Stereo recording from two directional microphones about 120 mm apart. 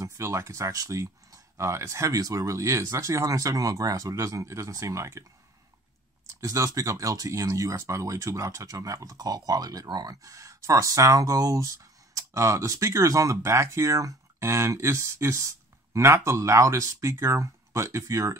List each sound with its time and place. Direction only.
0.0 s speech: 25° right (ahead or behind)
6.4 s speech: 30° right (ahead or behind)